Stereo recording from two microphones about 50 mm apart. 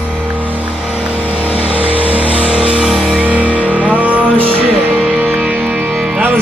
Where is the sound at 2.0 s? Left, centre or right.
Right.